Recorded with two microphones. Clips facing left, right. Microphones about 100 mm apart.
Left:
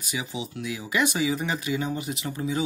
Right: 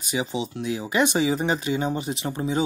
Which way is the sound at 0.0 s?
30° right (ahead or behind).